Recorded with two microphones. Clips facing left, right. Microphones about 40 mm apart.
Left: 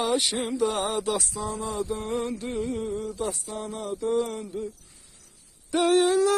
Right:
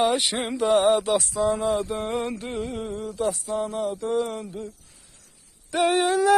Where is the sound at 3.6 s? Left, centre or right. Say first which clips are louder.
Right 5 dB; centre.